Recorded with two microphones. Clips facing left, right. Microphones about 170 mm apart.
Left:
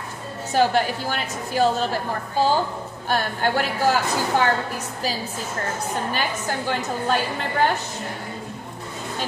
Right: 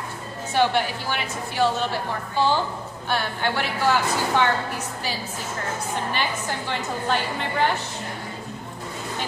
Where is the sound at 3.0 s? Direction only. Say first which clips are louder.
Left 2 dB; 45° left (ahead or behind).